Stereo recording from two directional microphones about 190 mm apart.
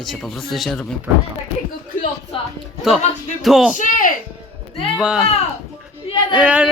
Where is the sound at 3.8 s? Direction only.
45° left (ahead or behind).